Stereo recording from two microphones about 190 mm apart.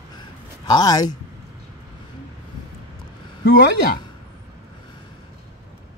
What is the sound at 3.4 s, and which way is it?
Speech, 50° left (ahead or behind).